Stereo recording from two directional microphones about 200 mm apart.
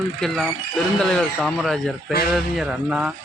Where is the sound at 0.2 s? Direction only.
Centre (ahead or behind).